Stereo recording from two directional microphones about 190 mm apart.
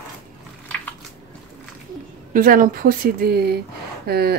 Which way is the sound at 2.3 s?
45° right (ahead or behind).